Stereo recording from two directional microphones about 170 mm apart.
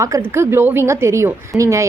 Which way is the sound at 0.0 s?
15° right (ahead or behind).